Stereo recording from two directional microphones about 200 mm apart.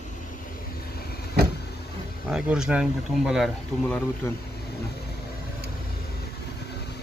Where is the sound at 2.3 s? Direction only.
5° right (ahead or behind).